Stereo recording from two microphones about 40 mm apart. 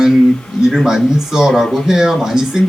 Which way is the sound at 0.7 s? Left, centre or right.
Centre.